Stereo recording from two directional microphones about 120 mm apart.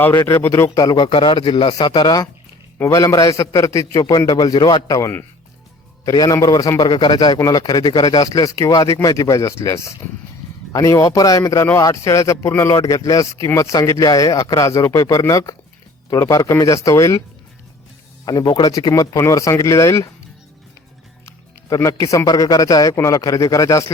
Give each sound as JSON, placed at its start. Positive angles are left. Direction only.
{"t": 0.4, "sound": "a man's voice", "side_deg": 25}
{"t": 18.3, "sound": "a man's voice", "side_deg": 35}
{"t": 21.2, "sound": "a man's voice", "side_deg": 25}